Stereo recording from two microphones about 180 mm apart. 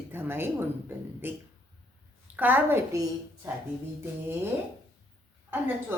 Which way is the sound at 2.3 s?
10° right (ahead or behind).